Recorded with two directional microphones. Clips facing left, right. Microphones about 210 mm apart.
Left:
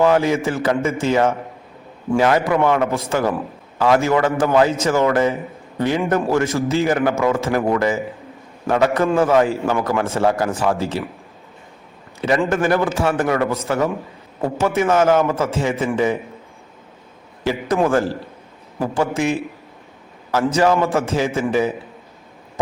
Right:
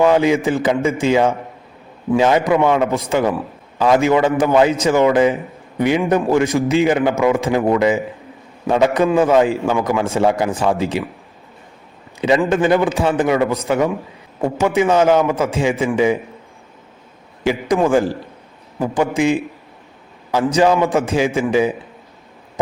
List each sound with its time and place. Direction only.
0.0 s a man's voice: 15° right (ahead or behind)
12.5 s a man's voice: 20° right (ahead or behind)
17.4 s a man's voice: 15° right (ahead or behind)
20.5 s a man's voice: 15° right (ahead or behind)